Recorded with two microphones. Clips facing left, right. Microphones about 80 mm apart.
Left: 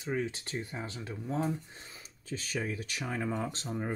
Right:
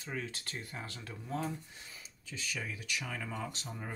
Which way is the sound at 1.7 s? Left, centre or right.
Left.